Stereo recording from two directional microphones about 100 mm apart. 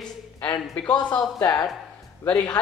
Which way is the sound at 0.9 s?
45° left (ahead or behind).